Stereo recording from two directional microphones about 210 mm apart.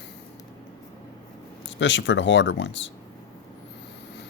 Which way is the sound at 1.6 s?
60° left (ahead or behind).